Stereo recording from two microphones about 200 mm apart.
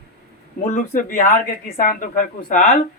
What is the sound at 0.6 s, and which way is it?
A woman's voice, 40° left (ahead or behind).